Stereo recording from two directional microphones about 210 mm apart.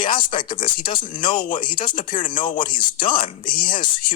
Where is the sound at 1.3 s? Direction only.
40° left (ahead or behind).